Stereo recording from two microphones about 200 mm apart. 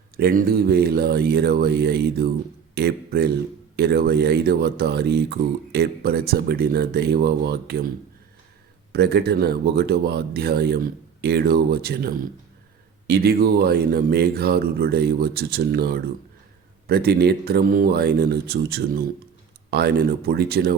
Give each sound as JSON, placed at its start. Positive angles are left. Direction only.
{"t": 0.2, "sound": "speech", "side_deg": -50}
{"t": 8.9, "sound": "speech", "side_deg": -55}